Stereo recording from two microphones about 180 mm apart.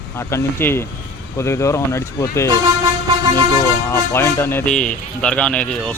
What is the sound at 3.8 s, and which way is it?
Speech, 15° left (ahead or behind).